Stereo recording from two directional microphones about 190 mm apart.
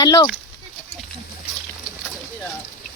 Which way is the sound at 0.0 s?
20° left (ahead or behind).